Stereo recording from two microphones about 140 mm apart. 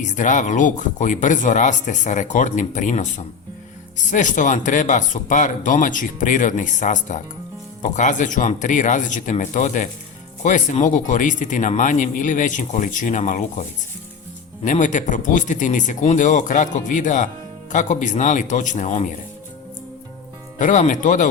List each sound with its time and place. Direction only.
0.0 s a man's voice: 65° left (ahead or behind)
14.6 s a man's voice: 65° left (ahead or behind)
20.6 s a man's voice: 65° left (ahead or behind)